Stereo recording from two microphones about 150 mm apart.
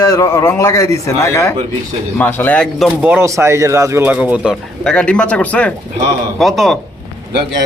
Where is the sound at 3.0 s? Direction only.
10° right (ahead or behind).